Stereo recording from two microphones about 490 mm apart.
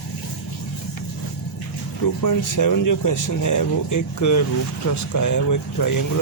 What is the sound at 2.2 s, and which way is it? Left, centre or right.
Speech, left.